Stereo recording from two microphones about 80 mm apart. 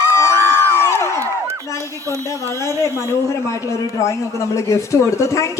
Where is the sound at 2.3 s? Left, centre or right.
Left.